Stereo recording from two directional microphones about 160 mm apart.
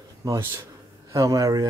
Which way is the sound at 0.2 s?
15° right (ahead or behind).